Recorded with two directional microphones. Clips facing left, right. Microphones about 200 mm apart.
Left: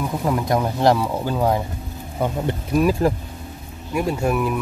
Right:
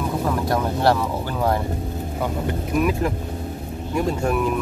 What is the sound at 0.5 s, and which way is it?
Speech, 15° left (ahead or behind).